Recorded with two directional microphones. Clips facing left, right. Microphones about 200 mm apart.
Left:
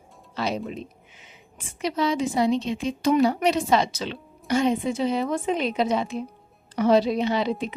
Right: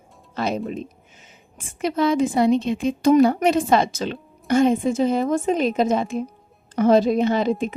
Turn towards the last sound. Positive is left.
turn(degrees=-45)  # may be behind; listen again after turning